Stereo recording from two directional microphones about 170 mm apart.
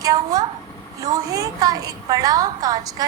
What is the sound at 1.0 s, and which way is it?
A woman's voice, 20° right (ahead or behind).